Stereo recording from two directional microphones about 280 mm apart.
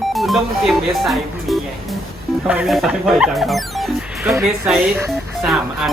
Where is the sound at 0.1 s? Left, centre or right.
Centre.